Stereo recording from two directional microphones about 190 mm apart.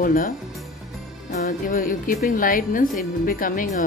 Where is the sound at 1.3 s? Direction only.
40° left (ahead or behind).